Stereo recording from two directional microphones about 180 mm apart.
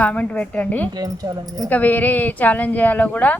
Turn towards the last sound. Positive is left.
turn(degrees=10)  # may be behind; listen again after turning